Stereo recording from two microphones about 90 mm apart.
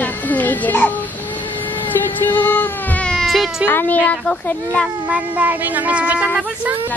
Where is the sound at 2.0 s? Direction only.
20° left (ahead or behind).